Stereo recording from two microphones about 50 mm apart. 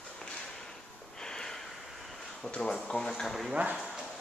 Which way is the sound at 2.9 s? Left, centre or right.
Centre.